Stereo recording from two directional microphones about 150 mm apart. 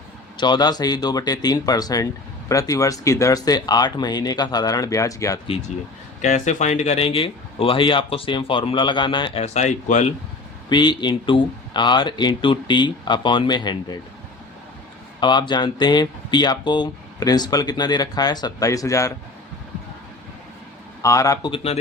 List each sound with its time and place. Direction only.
0.3 s speech: 30° left (ahead or behind)
6.2 s speech: 55° left (ahead or behind)
10.7 s speech: 30° left (ahead or behind)
15.2 s speech: 30° left (ahead or behind)
21.0 s speech: 20° left (ahead or behind)
21.5 s speech: 40° left (ahead or behind)